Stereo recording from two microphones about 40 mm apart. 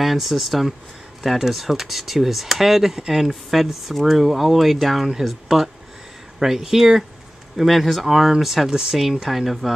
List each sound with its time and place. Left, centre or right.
0.0 s speech: centre
8.6 s speech: centre
8.9 s speech: centre